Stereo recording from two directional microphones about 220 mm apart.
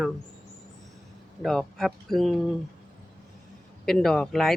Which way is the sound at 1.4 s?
Centre (ahead or behind).